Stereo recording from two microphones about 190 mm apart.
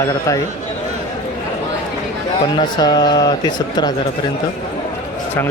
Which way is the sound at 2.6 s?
20° left (ahead or behind).